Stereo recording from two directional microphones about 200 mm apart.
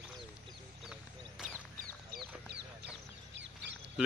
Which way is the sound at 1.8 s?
55° right (ahead or behind).